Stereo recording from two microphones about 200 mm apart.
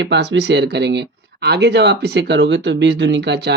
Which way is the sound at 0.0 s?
60° right (ahead or behind).